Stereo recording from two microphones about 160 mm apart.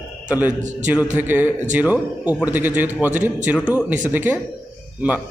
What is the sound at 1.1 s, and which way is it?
Speech, 10° right (ahead or behind).